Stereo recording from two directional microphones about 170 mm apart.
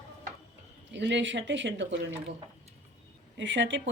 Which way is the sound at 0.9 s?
90° right.